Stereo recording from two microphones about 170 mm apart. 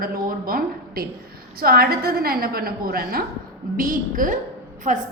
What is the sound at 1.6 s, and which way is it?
A woman's voice, 65° right (ahead or behind).